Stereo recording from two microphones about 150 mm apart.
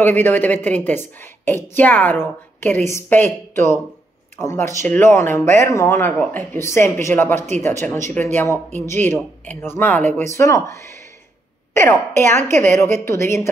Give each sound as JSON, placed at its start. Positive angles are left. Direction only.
{"t": 0.0, "sound": "speech", "side_deg": 15}
{"t": 4.4, "sound": "speech", "side_deg": 20}